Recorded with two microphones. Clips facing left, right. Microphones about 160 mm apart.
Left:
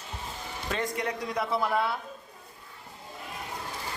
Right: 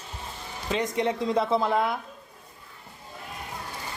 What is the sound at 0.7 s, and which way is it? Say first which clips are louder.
A woman's voice: right 5 dB; 20° right (ahead or behind).